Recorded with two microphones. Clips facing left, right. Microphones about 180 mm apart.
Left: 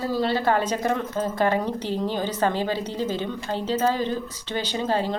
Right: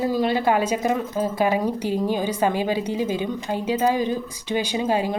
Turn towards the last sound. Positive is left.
turn(degrees=-10)  # may be behind; listen again after turning